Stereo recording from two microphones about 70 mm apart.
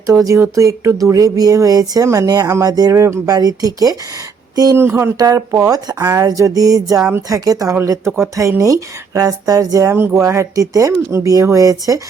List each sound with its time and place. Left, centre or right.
0.1 s speech: right
2.9 s speech: right
3.2 s speech: right
4.7 s speech: right
5.1 s speech: right
8.2 s speech: right
10.2 s speech: right